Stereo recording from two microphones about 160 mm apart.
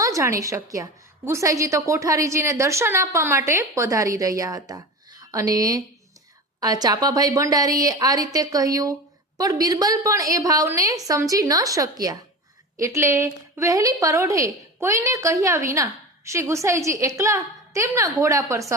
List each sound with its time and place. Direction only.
0.0 s a woman's voice: 20° right (ahead or behind)